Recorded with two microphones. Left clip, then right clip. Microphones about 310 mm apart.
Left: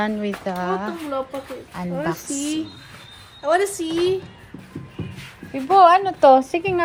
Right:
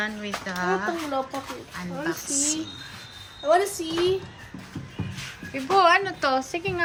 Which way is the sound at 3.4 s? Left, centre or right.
Left.